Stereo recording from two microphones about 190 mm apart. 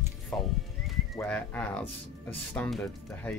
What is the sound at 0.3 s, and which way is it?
Speech, 10° left (ahead or behind).